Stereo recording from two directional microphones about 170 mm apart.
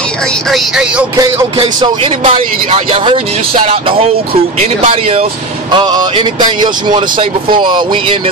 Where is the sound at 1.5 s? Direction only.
30° right (ahead or behind).